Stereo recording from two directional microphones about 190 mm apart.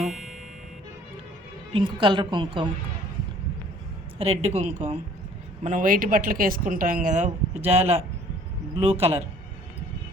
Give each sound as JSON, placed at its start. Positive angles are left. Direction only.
{"t": 0.0, "sound": "music", "side_deg": 0}
{"t": 1.7, "sound": "a woman's voice", "side_deg": -25}
{"t": 4.2, "sound": "a woman's voice", "side_deg": -35}